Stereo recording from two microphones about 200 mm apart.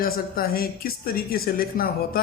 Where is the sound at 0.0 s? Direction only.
45° left (ahead or behind).